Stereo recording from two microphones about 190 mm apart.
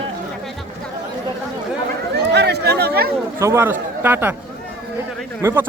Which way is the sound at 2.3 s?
60° right (ahead or behind).